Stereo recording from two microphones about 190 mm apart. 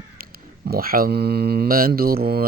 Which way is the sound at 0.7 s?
50° right (ahead or behind).